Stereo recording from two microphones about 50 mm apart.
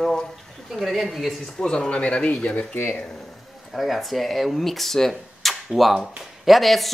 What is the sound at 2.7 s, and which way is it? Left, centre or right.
Speech, left.